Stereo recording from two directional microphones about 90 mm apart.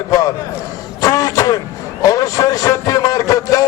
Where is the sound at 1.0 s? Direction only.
40° left (ahead or behind).